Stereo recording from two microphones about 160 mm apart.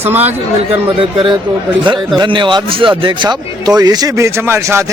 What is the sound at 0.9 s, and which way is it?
A man's voice, 35° right (ahead or behind).